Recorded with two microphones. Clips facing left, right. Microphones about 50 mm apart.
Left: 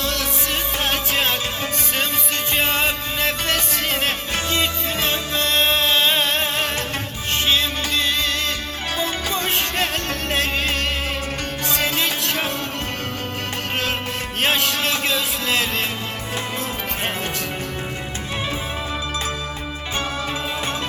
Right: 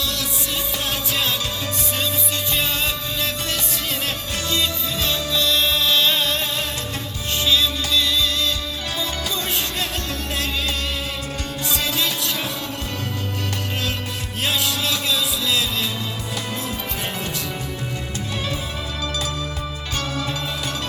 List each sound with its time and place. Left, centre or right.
0.0 s music: left
14.4 s music: left